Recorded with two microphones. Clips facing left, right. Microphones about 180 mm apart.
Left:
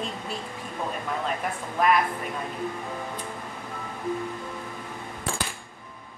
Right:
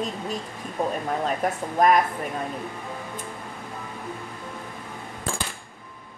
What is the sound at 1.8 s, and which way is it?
Speech, 40° right (ahead or behind).